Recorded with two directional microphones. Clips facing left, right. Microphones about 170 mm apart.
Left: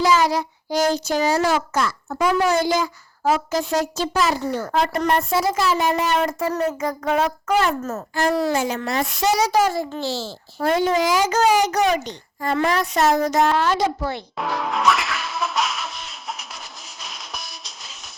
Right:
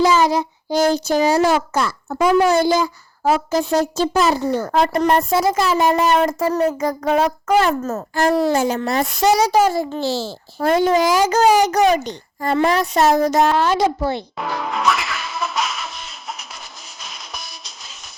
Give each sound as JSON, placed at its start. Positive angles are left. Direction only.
{"t": 0.0, "sound": "a child's voice", "side_deg": -25}
{"t": 8.3, "sound": "speech", "side_deg": -25}
{"t": 8.5, "sound": "a child's voice", "side_deg": -40}
{"t": 14.3, "sound": "music", "side_deg": 0}